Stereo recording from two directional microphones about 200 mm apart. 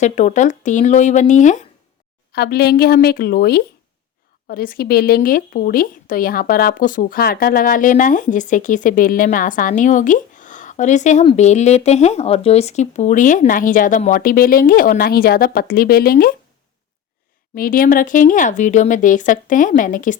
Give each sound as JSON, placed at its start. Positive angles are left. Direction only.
{"t": 0.0, "sound": "speech", "side_deg": 35}
{"t": 2.3, "sound": "speech", "side_deg": 50}
{"t": 17.5, "sound": "speech", "side_deg": 45}